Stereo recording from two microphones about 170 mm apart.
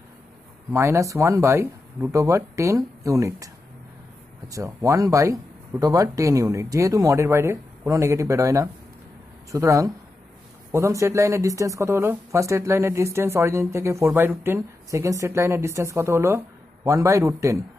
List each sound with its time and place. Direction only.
0.7 s speech: 15° right (ahead or behind)
4.5 s speech: 20° right (ahead or behind)